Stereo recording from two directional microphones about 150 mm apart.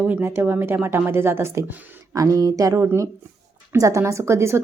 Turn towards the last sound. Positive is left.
turn(degrees=-20)  # may be behind; listen again after turning